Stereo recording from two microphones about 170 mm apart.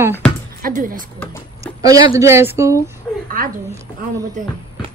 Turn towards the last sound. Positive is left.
turn(degrees=-50)  # may be behind; listen again after turning